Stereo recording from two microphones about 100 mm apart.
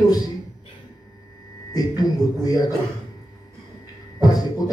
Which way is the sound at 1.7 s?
40° left (ahead or behind).